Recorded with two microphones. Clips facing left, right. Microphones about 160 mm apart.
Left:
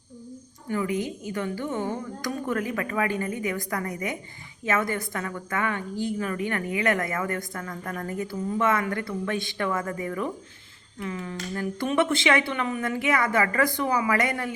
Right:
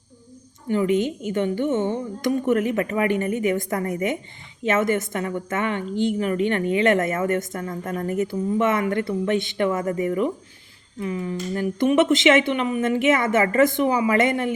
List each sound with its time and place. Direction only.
0.7 s a woman's voice: 25° right (ahead or behind)